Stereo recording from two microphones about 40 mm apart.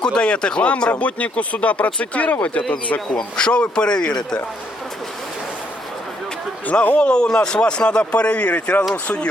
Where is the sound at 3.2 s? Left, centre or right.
Left.